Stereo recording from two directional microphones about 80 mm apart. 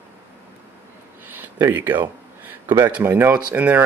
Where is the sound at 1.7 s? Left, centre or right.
Right.